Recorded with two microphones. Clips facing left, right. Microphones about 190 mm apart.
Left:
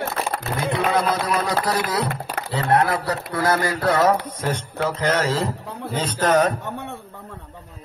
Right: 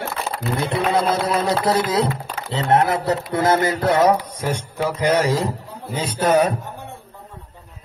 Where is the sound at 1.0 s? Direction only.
30° right (ahead or behind).